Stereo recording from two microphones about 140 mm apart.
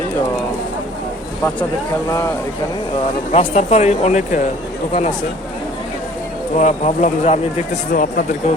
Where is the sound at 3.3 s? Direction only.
50° left (ahead or behind).